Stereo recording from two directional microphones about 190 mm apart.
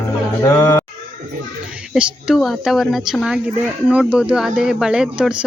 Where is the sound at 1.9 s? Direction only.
Centre (ahead or behind).